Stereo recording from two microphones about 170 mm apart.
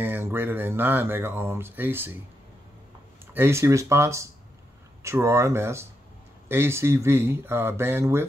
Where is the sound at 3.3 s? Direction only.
15° right (ahead or behind).